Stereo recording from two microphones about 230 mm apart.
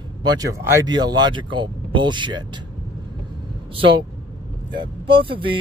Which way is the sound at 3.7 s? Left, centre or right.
Right.